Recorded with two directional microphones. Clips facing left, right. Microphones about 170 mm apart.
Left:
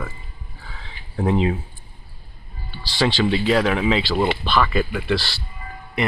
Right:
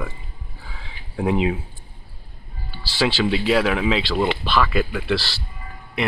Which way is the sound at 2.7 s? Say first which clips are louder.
Left 1 dB; 5° right (ahead or behind).